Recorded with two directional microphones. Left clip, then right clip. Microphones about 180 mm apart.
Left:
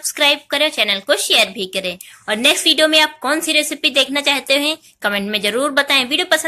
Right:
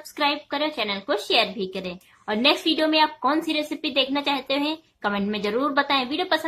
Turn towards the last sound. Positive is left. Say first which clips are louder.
# left 8 dB
turn(degrees=15)  # may be behind; listen again after turning